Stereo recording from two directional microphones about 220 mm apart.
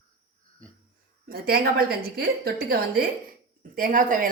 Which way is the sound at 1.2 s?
45° right (ahead or behind).